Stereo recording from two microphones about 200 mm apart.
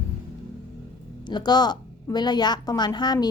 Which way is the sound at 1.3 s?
20° left (ahead or behind).